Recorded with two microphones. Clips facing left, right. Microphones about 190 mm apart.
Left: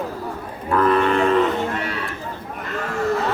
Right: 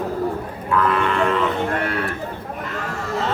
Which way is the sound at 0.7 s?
35° left (ahead or behind).